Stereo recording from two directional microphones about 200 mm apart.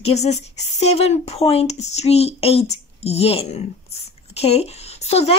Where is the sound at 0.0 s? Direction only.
35° left (ahead or behind).